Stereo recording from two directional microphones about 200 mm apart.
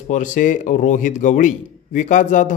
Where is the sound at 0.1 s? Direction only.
40° left (ahead or behind).